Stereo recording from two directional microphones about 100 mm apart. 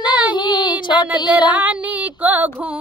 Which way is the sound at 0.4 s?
50° left (ahead or behind).